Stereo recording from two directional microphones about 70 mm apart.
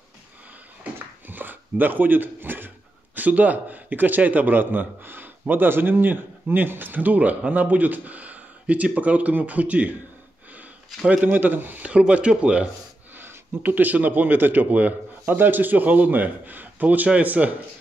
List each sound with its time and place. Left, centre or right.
0.9 s a sound: right
3.2 s a man's voice: right
11.2 s a man's voice: right
13.2 s a man's voice: right